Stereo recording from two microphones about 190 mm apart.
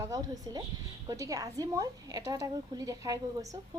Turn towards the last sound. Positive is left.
turn(degrees=-20)  # may be behind; listen again after turning